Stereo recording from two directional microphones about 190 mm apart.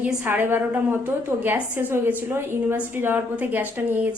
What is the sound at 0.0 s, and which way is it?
A woman's voice, 10° right (ahead or behind).